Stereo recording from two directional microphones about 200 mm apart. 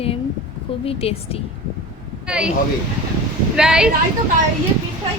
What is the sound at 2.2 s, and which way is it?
Speech, 5° right (ahead or behind).